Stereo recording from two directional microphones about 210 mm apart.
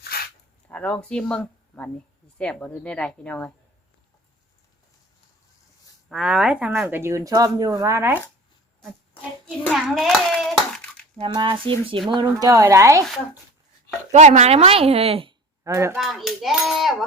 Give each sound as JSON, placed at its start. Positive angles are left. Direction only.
{"t": 0.0, "sound": "a sound", "side_deg": 45}
{"t": 0.7, "sound": "a woman's voice", "side_deg": 5}
{"t": 6.1, "sound": "speech", "side_deg": -5}
{"t": 9.6, "sound": "a woman's voice", "side_deg": 0}
{"t": 11.2, "sound": "a woman's voice", "side_deg": -25}
{"t": 14.1, "sound": "a woman's voice", "side_deg": -35}
{"t": 15.6, "sound": "speech", "side_deg": -15}
{"t": 16.0, "sound": "a woman's voice", "side_deg": 0}